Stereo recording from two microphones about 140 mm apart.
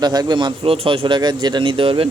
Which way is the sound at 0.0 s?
30° right (ahead or behind).